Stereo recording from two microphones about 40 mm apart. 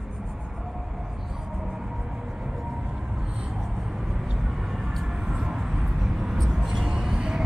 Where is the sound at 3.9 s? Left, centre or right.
Centre.